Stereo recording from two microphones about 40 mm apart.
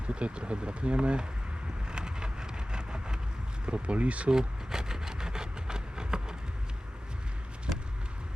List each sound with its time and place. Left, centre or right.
0.1 s speech: right
1.9 s vehicle: right
3.7 s speech: right
4.3 s a sound: centre